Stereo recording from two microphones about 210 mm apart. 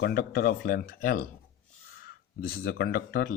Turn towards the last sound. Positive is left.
turn(degrees=45)  # may be behind; listen again after turning